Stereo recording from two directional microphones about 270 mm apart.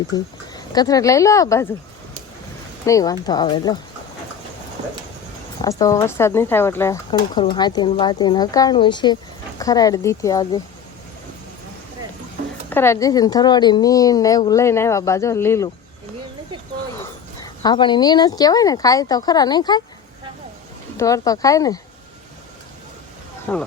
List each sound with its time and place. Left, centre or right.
0.1 s speech: centre
2.8 s a woman's voice: centre
5.6 s a woman's voice: centre
12.7 s a woman's voice: centre
17.4 s a woman's voice: centre
20.9 s a woman's voice: centre
23.5 s speech: centre